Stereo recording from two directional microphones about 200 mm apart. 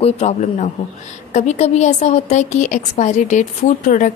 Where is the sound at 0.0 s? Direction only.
35° left (ahead or behind).